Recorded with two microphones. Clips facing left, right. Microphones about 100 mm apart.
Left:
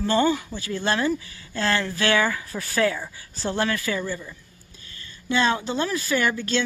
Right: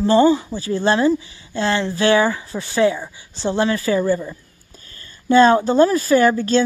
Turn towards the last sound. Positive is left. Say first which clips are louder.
# right 9 dB
turn(degrees=-35)  # may be behind; listen again after turning